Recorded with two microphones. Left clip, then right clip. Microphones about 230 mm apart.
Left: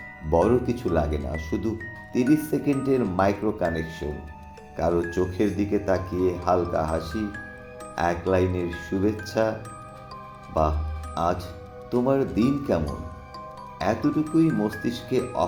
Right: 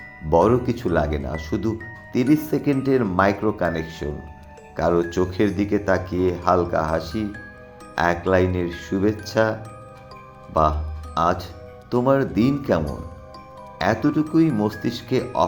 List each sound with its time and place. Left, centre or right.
0.3 s speech: centre